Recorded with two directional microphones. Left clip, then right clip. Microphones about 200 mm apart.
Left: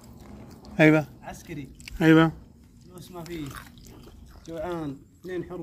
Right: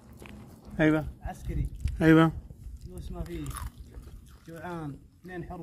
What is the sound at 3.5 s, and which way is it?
Speech, 55° right (ahead or behind).